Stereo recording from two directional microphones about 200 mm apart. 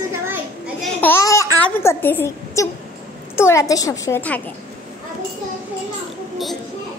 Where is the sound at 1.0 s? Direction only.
15° left (ahead or behind).